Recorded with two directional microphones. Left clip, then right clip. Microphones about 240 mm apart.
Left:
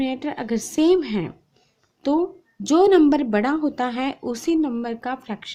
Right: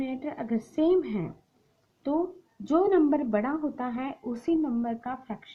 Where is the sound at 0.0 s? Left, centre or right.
Left.